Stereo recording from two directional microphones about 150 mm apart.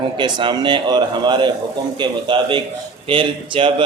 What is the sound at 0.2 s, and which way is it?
A man's voice, 30° right (ahead or behind).